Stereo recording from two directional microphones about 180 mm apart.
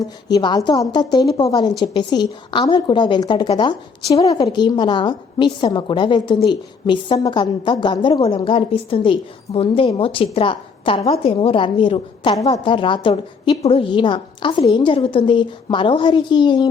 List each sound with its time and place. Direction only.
0.3 s a woman's voice: 25° left (ahead or behind)